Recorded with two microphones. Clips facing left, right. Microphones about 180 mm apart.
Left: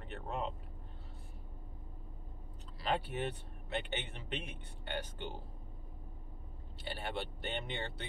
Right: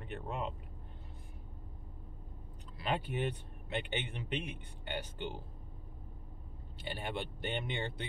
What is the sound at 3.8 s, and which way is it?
Speech, 15° right (ahead or behind).